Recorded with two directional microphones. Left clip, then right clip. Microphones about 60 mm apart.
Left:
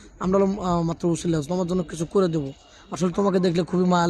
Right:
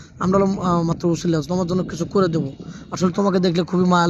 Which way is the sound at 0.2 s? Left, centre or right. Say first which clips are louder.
Right 3 dB; centre.